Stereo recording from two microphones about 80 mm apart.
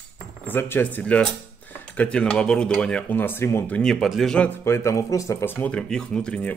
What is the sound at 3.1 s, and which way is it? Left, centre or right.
Speech, left.